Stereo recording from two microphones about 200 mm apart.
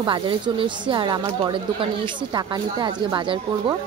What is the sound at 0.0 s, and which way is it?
Speech, 25° right (ahead or behind).